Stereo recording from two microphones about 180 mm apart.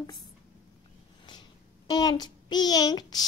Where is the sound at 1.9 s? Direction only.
20° left (ahead or behind).